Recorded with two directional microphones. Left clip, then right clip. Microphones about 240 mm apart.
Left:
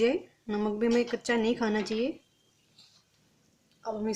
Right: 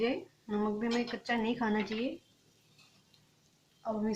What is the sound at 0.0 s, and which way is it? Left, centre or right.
Speech, left.